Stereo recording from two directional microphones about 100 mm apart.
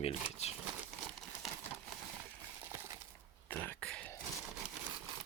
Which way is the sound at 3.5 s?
10° left (ahead or behind).